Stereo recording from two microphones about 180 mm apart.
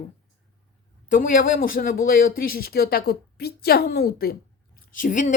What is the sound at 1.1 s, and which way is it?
Speech, 45° left (ahead or behind).